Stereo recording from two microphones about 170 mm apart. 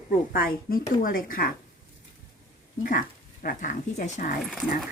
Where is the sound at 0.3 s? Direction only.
60° left (ahead or behind).